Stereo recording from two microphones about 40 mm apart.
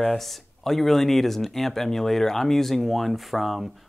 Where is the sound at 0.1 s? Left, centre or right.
Centre.